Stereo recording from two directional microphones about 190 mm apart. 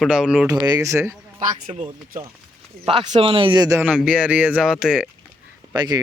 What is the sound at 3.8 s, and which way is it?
Speech, 5° right (ahead or behind).